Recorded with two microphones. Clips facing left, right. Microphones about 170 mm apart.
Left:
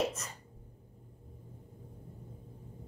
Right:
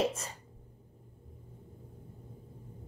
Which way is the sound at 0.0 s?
30° right (ahead or behind).